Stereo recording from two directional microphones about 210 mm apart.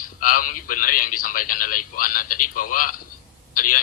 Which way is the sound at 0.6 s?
40° left (ahead or behind).